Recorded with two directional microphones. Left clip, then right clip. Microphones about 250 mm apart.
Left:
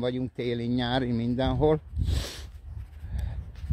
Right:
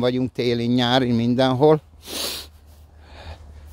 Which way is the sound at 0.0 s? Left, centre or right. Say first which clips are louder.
Right 9 dB; right.